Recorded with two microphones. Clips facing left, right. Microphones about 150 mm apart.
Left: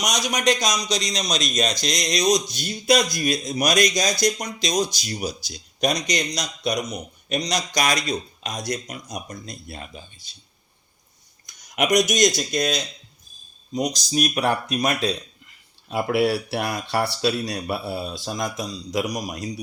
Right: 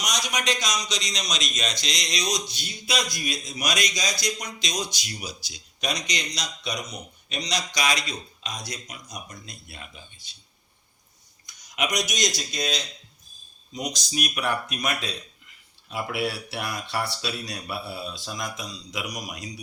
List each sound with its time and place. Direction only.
0.0 s a man's voice: 40° left (ahead or behind)
4.4 s a man's voice: 35° left (ahead or behind)
9.2 s speech: 40° left (ahead or behind)
11.4 s a man's voice: 50° left (ahead or behind)
16.1 s speech: 35° left (ahead or behind)